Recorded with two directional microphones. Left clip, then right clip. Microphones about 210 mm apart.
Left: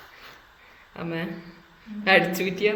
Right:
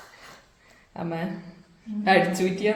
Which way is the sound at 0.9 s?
55° left (ahead or behind).